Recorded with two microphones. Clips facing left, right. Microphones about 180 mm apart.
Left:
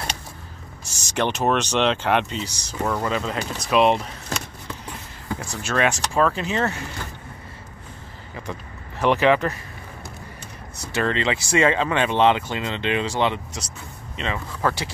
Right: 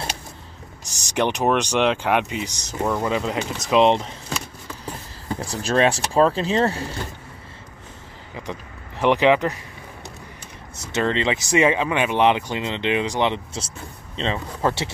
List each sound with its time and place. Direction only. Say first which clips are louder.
0.8 s speech: right 2 dB; 15° right (ahead or behind)
5.6 s speech: right 3 dB; 35° right (ahead or behind)
9.0 s speech: right 1 dB; 15° right (ahead or behind)
10.8 s speech: right 1 dB; 20° right (ahead or behind)